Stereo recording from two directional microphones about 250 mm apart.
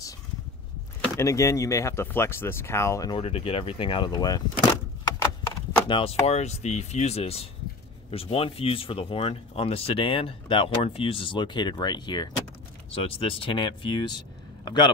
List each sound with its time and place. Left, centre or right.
1.0 s speech: centre
5.9 s speech: left